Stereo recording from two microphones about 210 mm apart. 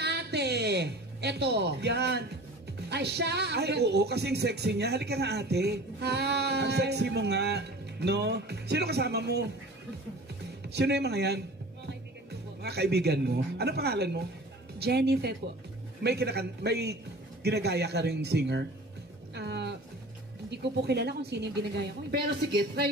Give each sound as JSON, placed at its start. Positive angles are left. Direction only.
{"t": 0.0, "sound": "a woman's voice", "side_deg": -50}
{"t": 10.7, "sound": "speech", "side_deg": -50}
{"t": 19.3, "sound": "music", "side_deg": -55}
{"t": 20.4, "sound": "speech", "side_deg": -55}